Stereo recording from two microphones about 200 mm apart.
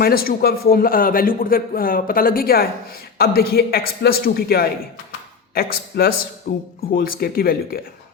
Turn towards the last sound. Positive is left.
turn(degrees=50)  # may be behind; listen again after turning